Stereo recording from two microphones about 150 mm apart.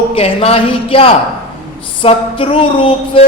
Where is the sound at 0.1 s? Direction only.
40° left (ahead or behind).